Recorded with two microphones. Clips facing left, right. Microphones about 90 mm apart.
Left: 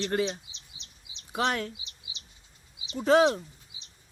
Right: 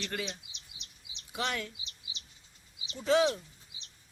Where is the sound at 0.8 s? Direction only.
35° left (ahead or behind).